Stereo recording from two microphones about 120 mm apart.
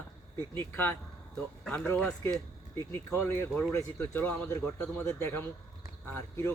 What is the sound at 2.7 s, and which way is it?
Speech, 25° left (ahead or behind).